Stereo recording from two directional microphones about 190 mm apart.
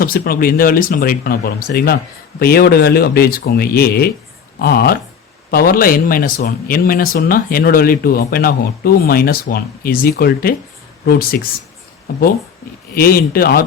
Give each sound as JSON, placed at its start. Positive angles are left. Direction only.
{"t": 0.0, "sound": "speech", "side_deg": 50}
{"t": 12.1, "sound": "speech", "side_deg": 50}